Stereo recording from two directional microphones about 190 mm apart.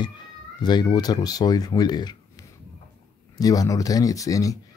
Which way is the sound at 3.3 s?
20° left (ahead or behind).